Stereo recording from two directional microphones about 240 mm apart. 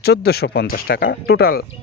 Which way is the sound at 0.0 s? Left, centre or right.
Left.